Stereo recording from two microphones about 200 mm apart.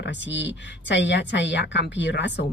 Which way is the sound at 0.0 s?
65° left (ahead or behind).